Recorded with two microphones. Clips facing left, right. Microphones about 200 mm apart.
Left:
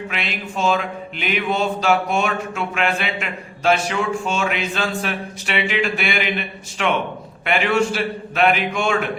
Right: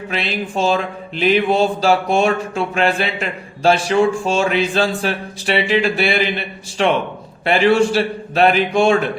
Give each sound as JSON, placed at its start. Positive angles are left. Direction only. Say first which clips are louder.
{"t": 0.1, "sound": "mantra", "louder": "right 6 dB", "side_deg": -35}